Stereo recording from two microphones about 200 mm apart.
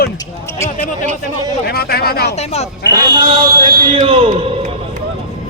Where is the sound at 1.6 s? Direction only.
50° left (ahead or behind).